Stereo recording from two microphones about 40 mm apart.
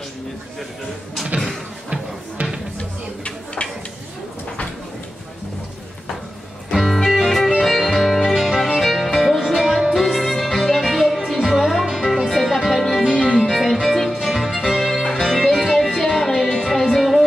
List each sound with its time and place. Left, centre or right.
2.8 s a sound: left
6.7 s music: centre
13.1 s music: left
13.4 s music: centre
15.0 s music: centre